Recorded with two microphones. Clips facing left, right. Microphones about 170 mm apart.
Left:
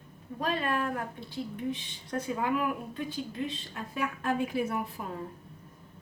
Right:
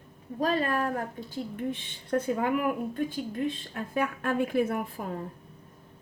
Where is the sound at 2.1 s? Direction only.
60° right (ahead or behind).